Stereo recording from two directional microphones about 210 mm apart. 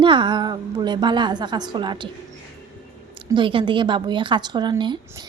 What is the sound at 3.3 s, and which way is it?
A woman's voice, 25° right (ahead or behind).